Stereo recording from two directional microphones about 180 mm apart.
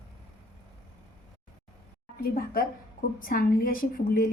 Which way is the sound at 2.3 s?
55° left (ahead or behind).